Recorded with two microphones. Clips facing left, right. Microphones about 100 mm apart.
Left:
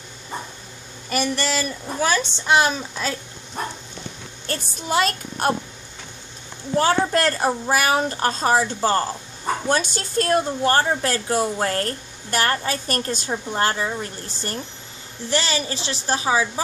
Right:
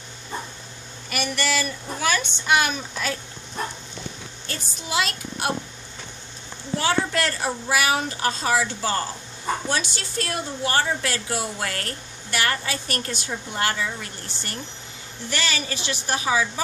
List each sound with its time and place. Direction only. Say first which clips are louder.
1.1 s a woman's voice: left 3 dB; 35° left (ahead or behind)
4.5 s a woman's voice: left 6 dB; 45° left (ahead or behind)
6.8 s a woman's voice: left 5 dB; 40° left (ahead or behind)